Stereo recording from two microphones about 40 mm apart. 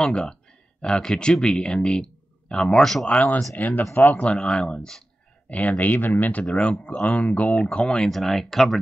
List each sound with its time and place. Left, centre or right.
0.0 s speech: left
2.8 s speech: centre
3.1 s speech: left
4.2 s speech: left
5.5 s speech: left
6.4 s speech: left
7.7 s speech: left
8.1 s speech: centre